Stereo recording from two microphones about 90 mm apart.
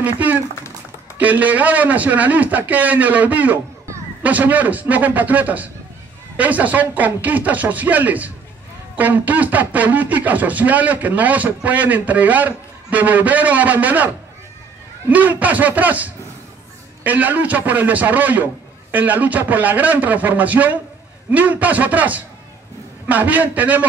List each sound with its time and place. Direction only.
0.0 s speech: 15° right (ahead or behind)